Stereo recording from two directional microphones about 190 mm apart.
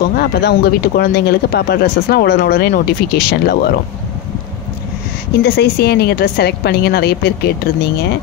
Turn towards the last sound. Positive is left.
turn(degrees=60)  # may be behind; listen again after turning